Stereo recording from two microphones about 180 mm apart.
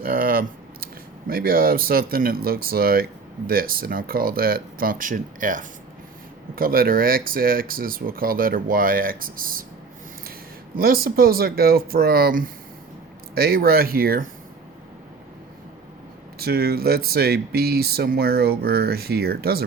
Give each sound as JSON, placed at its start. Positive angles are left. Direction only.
{"t": 0.0, "sound": "a sound", "side_deg": -55}
{"t": 1.3, "sound": "speech", "side_deg": -55}
{"t": 10.8, "sound": "speech", "side_deg": -55}
{"t": 16.4, "sound": "speech", "side_deg": -60}